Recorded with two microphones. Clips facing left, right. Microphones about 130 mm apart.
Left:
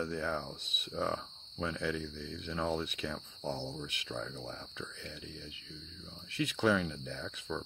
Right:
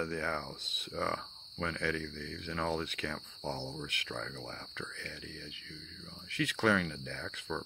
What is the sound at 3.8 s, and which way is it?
Speech, 15° left (ahead or behind).